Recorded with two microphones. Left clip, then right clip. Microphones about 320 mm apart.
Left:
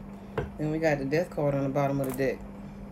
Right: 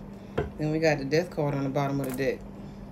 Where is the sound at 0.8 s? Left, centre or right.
Left.